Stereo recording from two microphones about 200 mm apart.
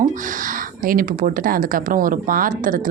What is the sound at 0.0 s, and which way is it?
Speech, 40° right (ahead or behind).